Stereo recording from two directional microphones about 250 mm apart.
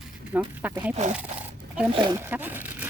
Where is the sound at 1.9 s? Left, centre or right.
Right.